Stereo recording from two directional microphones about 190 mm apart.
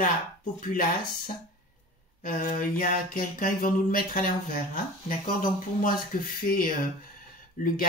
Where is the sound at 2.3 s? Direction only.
45° left (ahead or behind).